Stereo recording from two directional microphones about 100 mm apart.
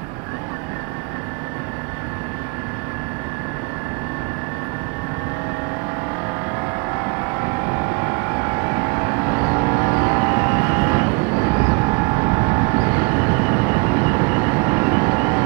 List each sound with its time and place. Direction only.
7.7 s vehicle: 30° right (ahead or behind)